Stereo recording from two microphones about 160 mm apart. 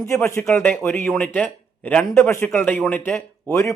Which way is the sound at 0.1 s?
15° left (ahead or behind).